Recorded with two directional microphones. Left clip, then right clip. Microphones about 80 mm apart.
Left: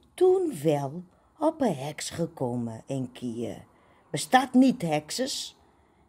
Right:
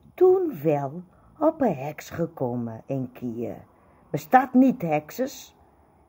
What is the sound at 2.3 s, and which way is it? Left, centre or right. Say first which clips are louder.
A woman's voice: right 2 dB; left.